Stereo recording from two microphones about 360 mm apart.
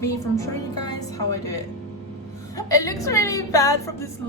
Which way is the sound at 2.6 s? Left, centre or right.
Centre.